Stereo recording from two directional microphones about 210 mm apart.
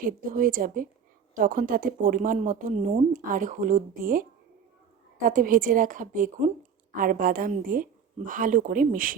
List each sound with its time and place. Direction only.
0.0 s speech: 40° right (ahead or behind)